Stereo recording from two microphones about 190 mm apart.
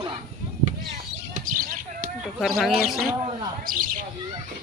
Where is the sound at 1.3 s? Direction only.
45° right (ahead or behind).